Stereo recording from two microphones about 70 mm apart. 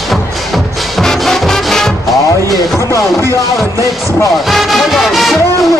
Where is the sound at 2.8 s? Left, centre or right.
Left.